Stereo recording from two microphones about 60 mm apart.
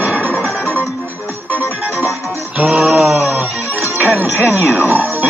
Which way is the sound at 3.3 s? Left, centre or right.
Right.